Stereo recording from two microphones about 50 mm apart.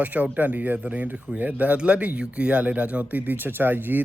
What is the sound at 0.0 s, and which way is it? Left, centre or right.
Speech, right.